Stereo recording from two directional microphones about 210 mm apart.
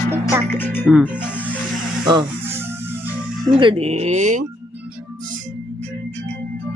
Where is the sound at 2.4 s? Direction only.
10° right (ahead or behind).